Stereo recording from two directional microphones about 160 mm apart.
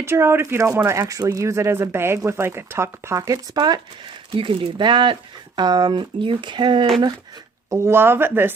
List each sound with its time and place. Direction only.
0.0 s speech: 15° right (ahead or behind); by 6.9 s 30° right (ahead or behind)
7.7 s speech: 15° right (ahead or behind)